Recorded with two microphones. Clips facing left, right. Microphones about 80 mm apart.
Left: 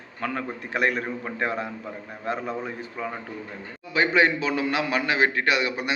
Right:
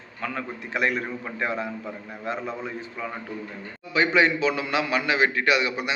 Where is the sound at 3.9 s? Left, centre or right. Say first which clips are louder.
Even; left.